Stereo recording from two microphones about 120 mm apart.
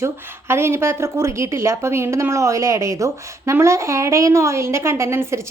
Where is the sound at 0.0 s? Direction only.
20° right (ahead or behind).